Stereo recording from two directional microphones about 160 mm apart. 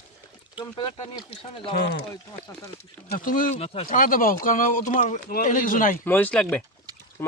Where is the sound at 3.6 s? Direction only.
40° left (ahead or behind).